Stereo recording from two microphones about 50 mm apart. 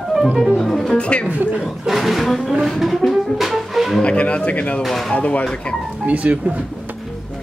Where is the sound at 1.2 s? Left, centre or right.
Right.